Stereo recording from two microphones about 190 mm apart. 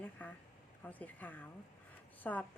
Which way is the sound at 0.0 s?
10° left (ahead or behind).